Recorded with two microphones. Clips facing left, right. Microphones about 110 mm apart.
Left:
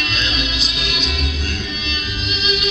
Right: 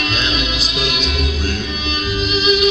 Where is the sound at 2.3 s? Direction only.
40° right (ahead or behind).